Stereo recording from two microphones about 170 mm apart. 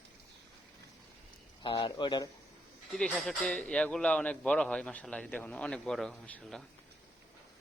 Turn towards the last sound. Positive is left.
turn(degrees=5)  # may be behind; listen again after turning